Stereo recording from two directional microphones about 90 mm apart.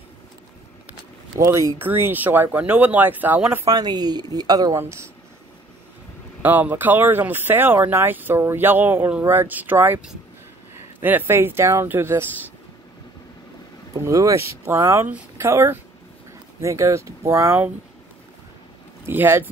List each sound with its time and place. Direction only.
1.4 s speech: 35° right (ahead or behind)
1.8 s speech: 25° right (ahead or behind)
3.6 s a woman's voice: 50° right (ahead or behind)
4.7 s speech: 30° right (ahead or behind)
6.4 s speech: 20° right (ahead or behind)
11.0 s speech: 25° right (ahead or behind)
14.0 s speech: 35° right (ahead or behind)
19.0 s speech: 25° right (ahead or behind)